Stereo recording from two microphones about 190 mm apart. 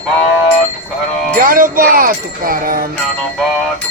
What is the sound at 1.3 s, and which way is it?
Speech, 45° right (ahead or behind).